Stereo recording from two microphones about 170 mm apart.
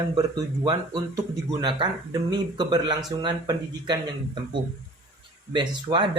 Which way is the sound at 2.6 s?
25° right (ahead or behind).